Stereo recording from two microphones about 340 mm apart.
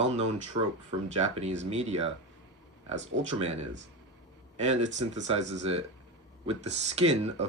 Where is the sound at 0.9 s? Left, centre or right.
Centre.